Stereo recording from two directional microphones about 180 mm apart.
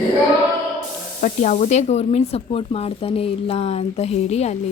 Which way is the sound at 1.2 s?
40° left (ahead or behind).